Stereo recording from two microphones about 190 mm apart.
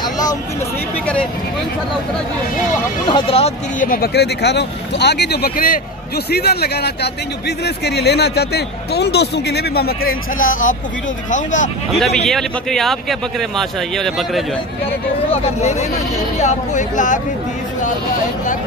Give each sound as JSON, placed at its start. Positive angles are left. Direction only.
{"t": 3.1, "sound": "speech", "side_deg": 25}
{"t": 3.8, "sound": "a man's voice", "side_deg": 50}
{"t": 12.3, "sound": "speech", "side_deg": 0}
{"t": 15.3, "sound": "speech", "side_deg": 35}